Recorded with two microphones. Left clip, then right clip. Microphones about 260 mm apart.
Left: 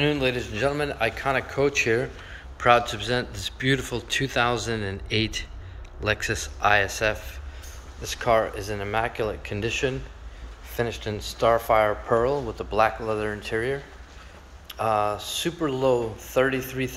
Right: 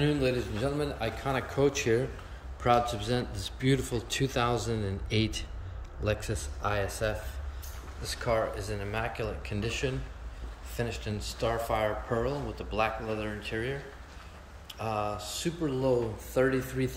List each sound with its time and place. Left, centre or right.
0.0 s a man's voice: centre
8.3 s a man's voice: centre